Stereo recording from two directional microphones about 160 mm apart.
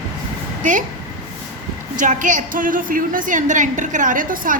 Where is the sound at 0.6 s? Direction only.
50° right (ahead or behind).